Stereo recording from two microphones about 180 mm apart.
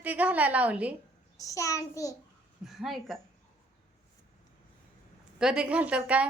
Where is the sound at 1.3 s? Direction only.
20° left (ahead or behind).